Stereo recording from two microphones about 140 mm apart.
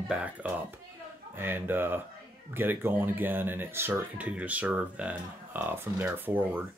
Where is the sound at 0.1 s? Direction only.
10° right (ahead or behind).